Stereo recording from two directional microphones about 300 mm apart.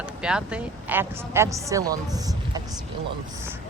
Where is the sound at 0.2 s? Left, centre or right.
Centre.